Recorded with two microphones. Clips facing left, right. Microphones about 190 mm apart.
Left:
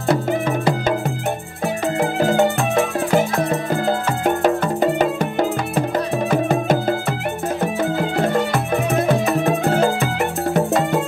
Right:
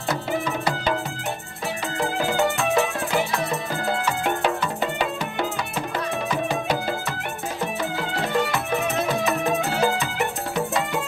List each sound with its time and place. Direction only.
0.5 s music: 50° left (ahead or behind)
2.2 s music: 45° left (ahead or behind)
6.3 s music: 50° left (ahead or behind)
8.2 s music: 50° left (ahead or behind)